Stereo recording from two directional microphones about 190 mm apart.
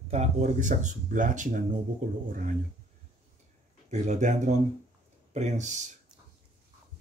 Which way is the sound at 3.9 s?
40° right (ahead or behind).